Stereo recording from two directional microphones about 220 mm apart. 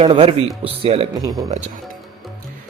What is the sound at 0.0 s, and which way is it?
A man's voice, 25° right (ahead or behind).